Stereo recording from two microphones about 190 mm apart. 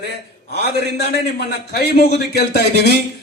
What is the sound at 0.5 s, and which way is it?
A man's voice, 60° left (ahead or behind).